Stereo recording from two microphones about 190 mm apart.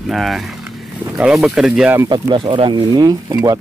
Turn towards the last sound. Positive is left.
turn(degrees=-20)  # may be behind; listen again after turning